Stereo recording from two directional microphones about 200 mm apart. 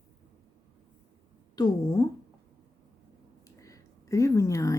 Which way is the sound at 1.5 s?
20° left (ahead or behind).